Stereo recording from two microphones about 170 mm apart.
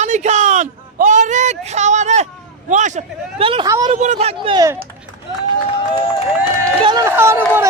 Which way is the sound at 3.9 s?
40° right (ahead or behind).